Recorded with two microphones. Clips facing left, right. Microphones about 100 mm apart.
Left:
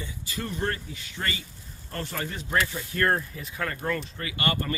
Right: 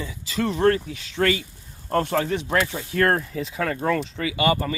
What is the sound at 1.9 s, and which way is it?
Speech, 65° right (ahead or behind).